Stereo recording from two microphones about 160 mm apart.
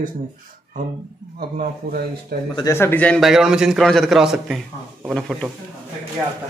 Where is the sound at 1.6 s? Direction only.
75° right (ahead or behind).